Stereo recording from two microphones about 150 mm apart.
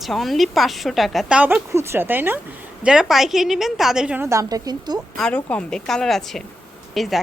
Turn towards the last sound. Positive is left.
turn(degrees=0)  # may be behind; listen again after turning